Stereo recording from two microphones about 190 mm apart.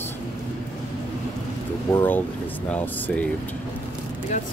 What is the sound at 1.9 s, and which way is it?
Speech, 10° left (ahead or behind).